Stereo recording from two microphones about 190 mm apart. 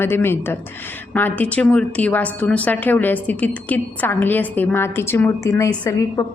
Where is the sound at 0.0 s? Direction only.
10° left (ahead or behind).